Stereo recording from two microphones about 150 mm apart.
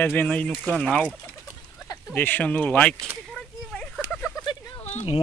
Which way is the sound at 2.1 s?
10° left (ahead or behind).